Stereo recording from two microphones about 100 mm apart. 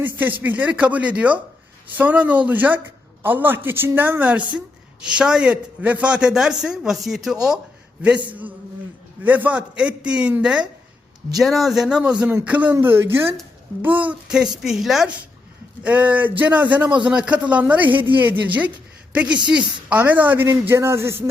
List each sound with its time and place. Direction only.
0.0 s a man's voice: 20° right (ahead or behind); by 7.3 s centre (ahead or behind)
8.3 s a man's voice: 15° right (ahead or behind)
14.6 s speech: 5° right (ahead or behind)
15.8 s a man's voice: 15° right (ahead or behind)
19.5 s a man's voice: 10° right (ahead or behind); by 21.2 s 25° right (ahead or behind)